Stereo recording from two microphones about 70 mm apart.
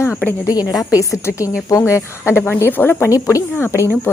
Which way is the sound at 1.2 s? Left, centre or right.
Left.